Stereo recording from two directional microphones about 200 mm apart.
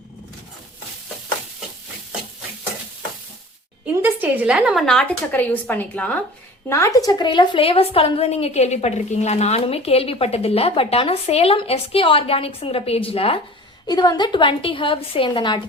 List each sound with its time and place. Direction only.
3.8 s a woman's voice: 10° right (ahead or behind); by 15.6 s 25° left (ahead or behind)